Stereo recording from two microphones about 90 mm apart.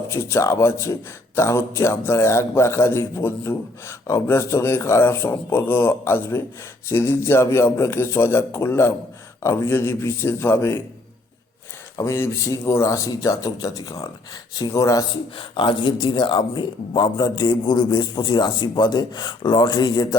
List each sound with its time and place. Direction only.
0.1 s a man's voice: 30° left (ahead or behind)
11.9 s speech: 30° left (ahead or behind)
15.4 s speech: 70° left (ahead or behind); by 20.1 s 50° left (ahead or behind)